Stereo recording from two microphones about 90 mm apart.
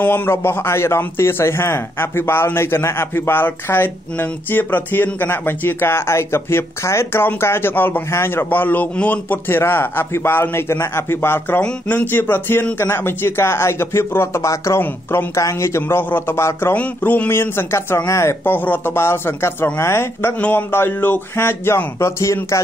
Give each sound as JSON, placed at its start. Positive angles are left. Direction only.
{"t": 0.0, "sound": "a man's voice", "side_deg": 20}
{"t": 16.7, "sound": "a man's voice", "side_deg": 15}